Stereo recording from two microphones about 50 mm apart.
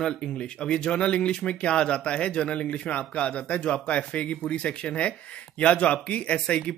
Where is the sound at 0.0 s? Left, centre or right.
Centre.